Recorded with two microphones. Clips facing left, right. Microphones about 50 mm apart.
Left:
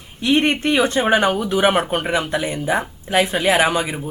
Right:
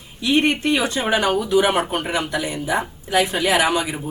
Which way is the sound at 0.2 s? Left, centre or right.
Left.